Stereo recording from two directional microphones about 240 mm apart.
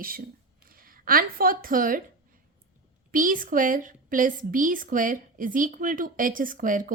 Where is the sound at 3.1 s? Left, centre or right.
Right.